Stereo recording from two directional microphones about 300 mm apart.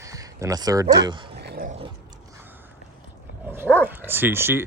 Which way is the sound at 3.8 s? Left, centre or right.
Centre.